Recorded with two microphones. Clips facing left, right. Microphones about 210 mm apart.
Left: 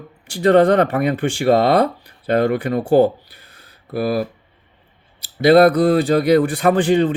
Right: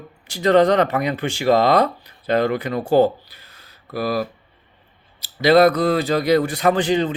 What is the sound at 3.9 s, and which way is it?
Speech, 55° left (ahead or behind).